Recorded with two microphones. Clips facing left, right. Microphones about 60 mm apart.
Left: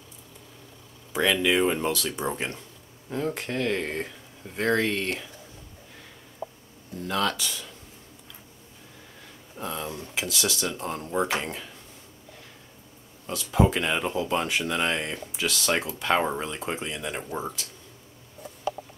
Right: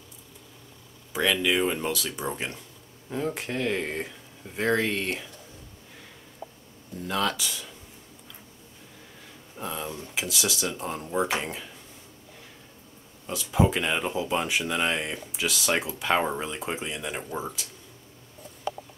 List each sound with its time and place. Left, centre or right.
1.1 s speech: centre
7.0 s speech: centre
9.6 s speech: centre
9.8 s speech: centre
10.1 s speech: centre
13.3 s speech: centre